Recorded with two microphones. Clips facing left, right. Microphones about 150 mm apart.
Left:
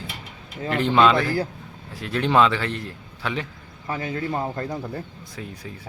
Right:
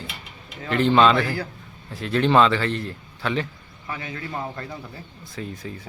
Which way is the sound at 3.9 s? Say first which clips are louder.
Left 5 dB; 35° left (ahead or behind).